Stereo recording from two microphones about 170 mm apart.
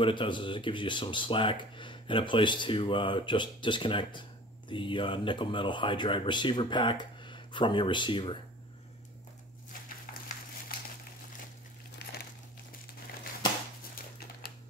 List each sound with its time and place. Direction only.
0.0 s speech: 30° left (ahead or behind)
12.0 s crumpling: 75° left (ahead or behind)